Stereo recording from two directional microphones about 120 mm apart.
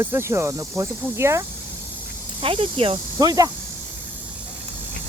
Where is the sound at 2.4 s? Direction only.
45° right (ahead or behind).